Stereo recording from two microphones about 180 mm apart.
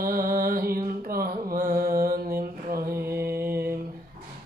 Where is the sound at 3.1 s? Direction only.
15° right (ahead or behind).